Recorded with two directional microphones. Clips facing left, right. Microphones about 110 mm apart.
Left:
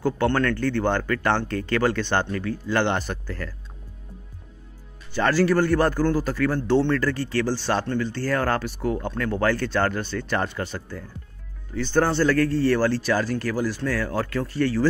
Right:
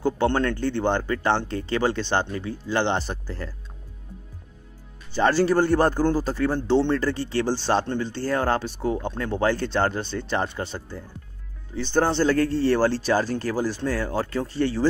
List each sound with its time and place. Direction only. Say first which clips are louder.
0.0 s a man's voice: even; 25° right (ahead or behind)
5.1 s a man's voice: right 1 dB; 25° right (ahead or behind)